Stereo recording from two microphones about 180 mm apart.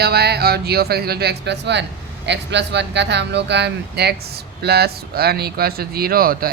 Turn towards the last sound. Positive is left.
turn(degrees=-55)  # may be behind; listen again after turning